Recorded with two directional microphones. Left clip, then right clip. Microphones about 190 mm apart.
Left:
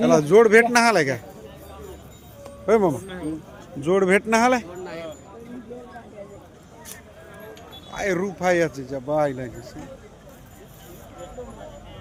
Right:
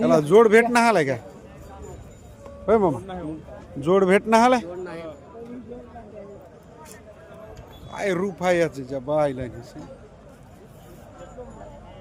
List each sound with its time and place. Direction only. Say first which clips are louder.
0.0 s a man's voice: left 1 dB; centre (ahead or behind)
2.6 s speech: left 1 dB; centre (ahead or behind)
3.8 s a man's voice: right 1 dB; 15° right (ahead or behind)
4.9 s a sound: left 1 dB; 55° right (ahead or behind)
7.9 s a man's voice: even; 5° right (ahead or behind)